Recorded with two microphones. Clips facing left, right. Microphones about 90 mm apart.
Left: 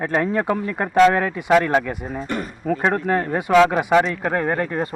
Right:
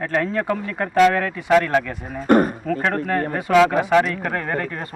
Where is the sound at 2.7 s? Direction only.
20° left (ahead or behind).